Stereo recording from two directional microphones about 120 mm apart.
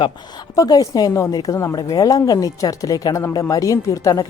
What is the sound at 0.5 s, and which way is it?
Speech, 30° left (ahead or behind).